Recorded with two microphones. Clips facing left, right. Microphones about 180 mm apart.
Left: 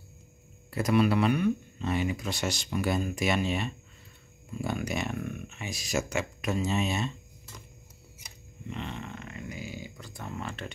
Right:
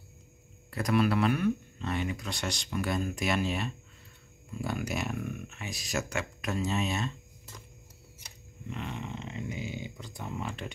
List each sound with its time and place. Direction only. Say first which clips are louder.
0.7 s speech: left 2 dB; 5° left (ahead or behind)
8.7 s speech: even; 10° right (ahead or behind)